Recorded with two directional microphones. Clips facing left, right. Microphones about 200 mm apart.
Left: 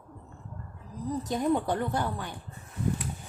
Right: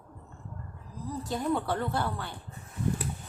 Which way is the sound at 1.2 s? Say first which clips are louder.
Left 2 dB; 20° left (ahead or behind).